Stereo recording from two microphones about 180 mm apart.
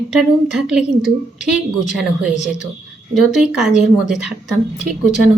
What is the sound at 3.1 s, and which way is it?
Speech, centre (ahead or behind).